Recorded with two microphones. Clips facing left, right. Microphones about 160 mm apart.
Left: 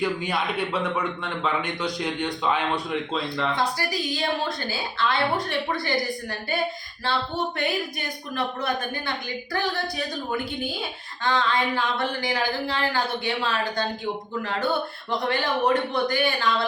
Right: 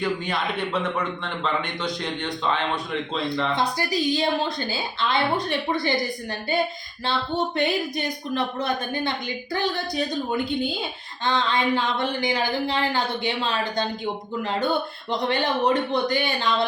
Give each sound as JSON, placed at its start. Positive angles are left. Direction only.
{"t": 0.0, "sound": "a man's voice", "side_deg": 5}
{"t": 3.5, "sound": "speech", "side_deg": -20}
{"t": 7.5, "sound": "speech", "side_deg": -25}